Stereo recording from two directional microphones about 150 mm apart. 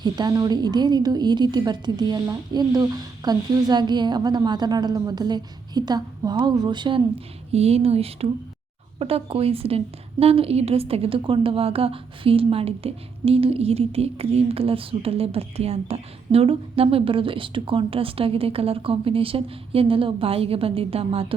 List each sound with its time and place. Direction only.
0.0 s a woman's voice: 30° right (ahead or behind)
7.5 s a woman's voice: 45° right (ahead or behind)